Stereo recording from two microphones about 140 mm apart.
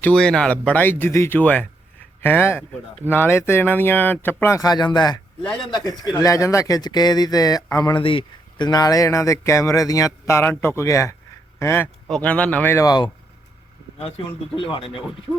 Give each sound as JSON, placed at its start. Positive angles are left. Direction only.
{"t": 0.0, "sound": "speech", "side_deg": 5}
{"t": 5.4, "sound": "speech", "side_deg": 5}
{"t": 5.7, "sound": "speech", "side_deg": 30}
{"t": 12.0, "sound": "speech", "side_deg": 5}
{"t": 14.5, "sound": "speech", "side_deg": 40}